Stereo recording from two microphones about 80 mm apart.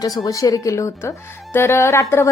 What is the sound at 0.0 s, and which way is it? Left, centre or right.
Speech, left.